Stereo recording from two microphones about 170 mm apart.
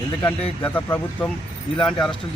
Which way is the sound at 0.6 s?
10° left (ahead or behind).